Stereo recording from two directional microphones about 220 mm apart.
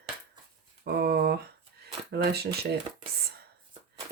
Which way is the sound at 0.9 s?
45° right (ahead or behind).